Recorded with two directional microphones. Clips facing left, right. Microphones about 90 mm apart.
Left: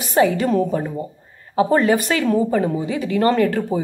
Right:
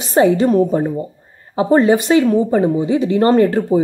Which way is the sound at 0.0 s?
30° right (ahead or behind).